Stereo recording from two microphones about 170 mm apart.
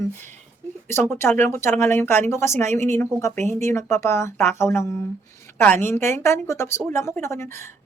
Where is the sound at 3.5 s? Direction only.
15° left (ahead or behind).